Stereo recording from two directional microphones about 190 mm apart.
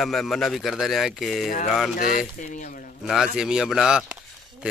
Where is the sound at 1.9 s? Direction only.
45° left (ahead or behind).